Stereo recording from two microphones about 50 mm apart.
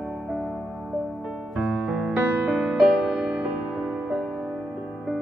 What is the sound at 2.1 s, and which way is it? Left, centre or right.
Music, right.